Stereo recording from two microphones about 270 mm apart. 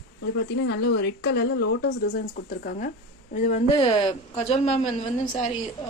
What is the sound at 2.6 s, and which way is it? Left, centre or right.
A woman's voice, left.